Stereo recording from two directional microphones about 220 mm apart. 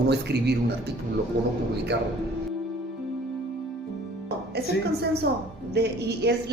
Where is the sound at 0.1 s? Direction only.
50° right (ahead or behind).